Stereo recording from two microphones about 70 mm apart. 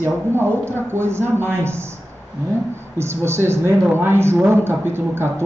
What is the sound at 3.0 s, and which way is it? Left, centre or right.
A man's voice, right.